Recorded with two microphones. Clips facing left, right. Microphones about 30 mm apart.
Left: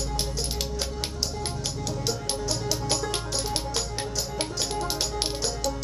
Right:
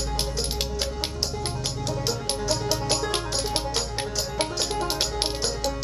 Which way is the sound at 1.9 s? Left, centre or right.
Right.